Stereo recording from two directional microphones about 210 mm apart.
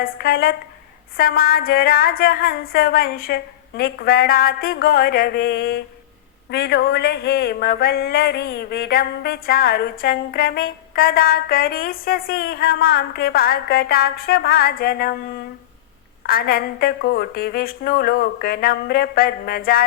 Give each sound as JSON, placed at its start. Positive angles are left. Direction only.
{"t": 0.0, "sound": "speech", "side_deg": 45}
{"t": 16.2, "sound": "speech", "side_deg": 45}